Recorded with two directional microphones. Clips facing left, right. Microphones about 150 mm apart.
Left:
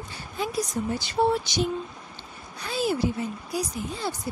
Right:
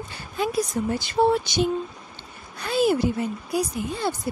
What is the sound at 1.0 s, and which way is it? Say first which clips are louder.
A woman's voice: right 3 dB; 55° right (ahead or behind).